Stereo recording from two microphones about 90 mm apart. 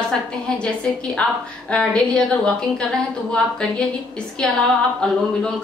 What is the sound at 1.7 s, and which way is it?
A woman's voice, 10° left (ahead or behind).